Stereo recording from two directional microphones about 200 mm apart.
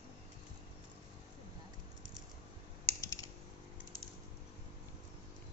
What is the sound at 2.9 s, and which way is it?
Typing, 15° left (ahead or behind).